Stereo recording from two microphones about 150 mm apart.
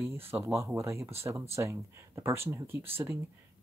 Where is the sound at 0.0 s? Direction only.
15° right (ahead or behind).